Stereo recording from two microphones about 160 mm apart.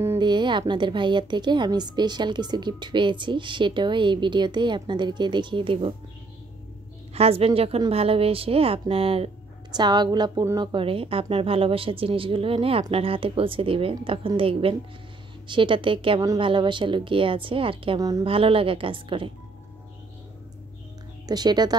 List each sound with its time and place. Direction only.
0.2 s a woman's voice: 30° right (ahead or behind)
7.2 s a woman's voice: 40° right (ahead or behind)
21.3 s a woman's voice: 25° right (ahead or behind)